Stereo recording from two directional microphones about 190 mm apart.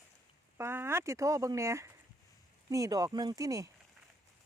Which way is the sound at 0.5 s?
10° right (ahead or behind).